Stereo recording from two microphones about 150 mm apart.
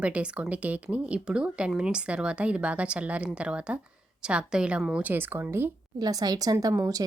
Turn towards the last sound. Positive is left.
turn(degrees=-20)  # may be behind; listen again after turning